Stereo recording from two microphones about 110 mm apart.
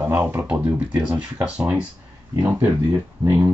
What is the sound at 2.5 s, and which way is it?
Speech, 30° right (ahead or behind).